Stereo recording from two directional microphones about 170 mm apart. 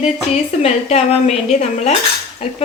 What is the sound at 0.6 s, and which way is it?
Speech, 40° left (ahead or behind).